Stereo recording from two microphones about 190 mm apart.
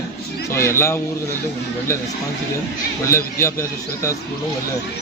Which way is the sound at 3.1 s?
15° left (ahead or behind).